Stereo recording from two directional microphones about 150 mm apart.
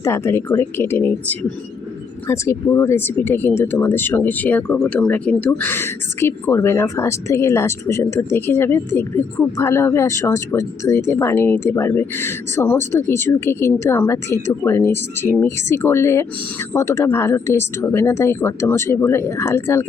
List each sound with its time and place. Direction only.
0.0 s speech: 20° left (ahead or behind)